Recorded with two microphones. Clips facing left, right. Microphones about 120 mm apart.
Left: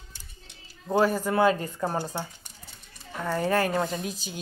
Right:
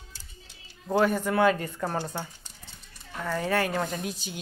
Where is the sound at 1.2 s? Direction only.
35° left (ahead or behind).